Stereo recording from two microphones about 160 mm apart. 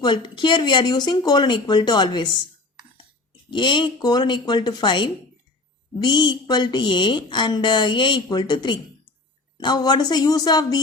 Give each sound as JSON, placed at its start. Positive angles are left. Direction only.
{"t": 0.0, "sound": "a woman's voice", "side_deg": 30}
{"t": 3.5, "sound": "a woman's voice", "side_deg": 30}